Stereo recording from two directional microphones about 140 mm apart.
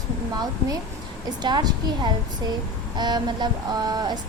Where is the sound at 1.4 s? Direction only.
30° right (ahead or behind).